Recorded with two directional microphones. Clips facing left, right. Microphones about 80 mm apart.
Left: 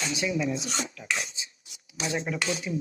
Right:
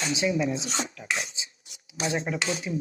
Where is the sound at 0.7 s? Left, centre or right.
Right.